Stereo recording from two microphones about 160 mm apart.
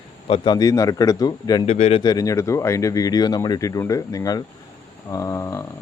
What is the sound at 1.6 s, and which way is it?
Speech, 40° left (ahead or behind).